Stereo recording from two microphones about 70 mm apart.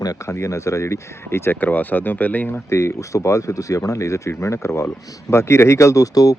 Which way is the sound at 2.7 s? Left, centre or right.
Left.